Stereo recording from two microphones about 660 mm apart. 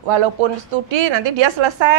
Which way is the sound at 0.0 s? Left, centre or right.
Right.